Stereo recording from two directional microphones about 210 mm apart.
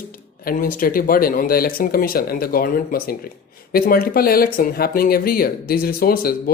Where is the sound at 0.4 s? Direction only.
40° left (ahead or behind).